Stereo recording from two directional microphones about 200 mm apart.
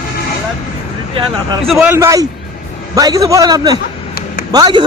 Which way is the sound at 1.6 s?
Centre (ahead or behind).